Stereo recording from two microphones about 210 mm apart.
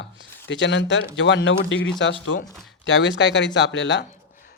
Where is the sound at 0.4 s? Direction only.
60° left (ahead or behind).